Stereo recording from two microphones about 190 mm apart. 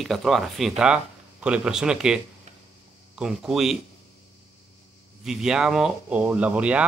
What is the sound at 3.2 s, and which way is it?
Speech, centre (ahead or behind).